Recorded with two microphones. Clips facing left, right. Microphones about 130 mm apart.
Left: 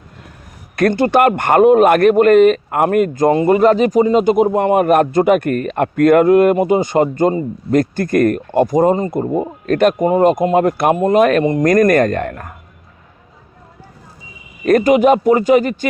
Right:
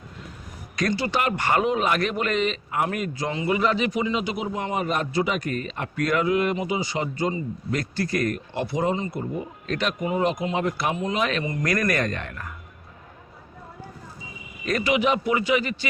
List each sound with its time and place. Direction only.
0.8 s speech: 55° left (ahead or behind)
14.6 s speech: 50° left (ahead or behind)